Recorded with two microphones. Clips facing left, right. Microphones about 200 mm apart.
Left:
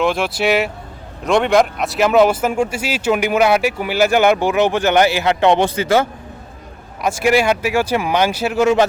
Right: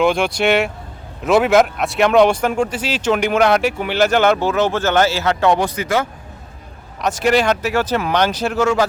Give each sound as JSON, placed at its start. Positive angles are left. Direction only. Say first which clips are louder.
{"t": 0.0, "sound": "speech", "louder": "right 1 dB", "side_deg": 0}
{"t": 7.0, "sound": "speech", "louder": "left 1 dB", "side_deg": 10}